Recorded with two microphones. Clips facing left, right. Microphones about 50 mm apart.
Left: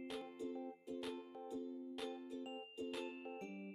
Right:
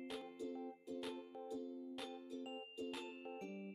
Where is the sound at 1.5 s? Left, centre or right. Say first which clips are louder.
Left 1 dB; left.